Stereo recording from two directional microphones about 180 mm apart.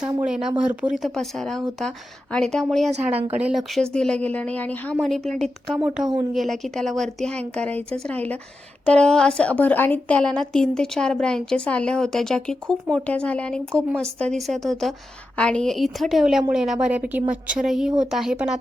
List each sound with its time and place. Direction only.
0.4 s a woman's voice: 5° right (ahead or behind)
2.9 s a woman's voice: 35° right (ahead or behind)
3.4 s a woman's voice: centre (ahead or behind)